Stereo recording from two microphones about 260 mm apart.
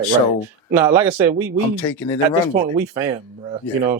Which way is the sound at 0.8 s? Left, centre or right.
Centre.